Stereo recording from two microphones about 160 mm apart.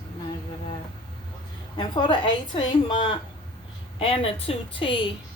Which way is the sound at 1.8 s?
30° left (ahead or behind).